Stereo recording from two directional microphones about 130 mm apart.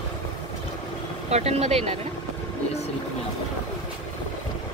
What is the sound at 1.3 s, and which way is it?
Speech, 55° right (ahead or behind).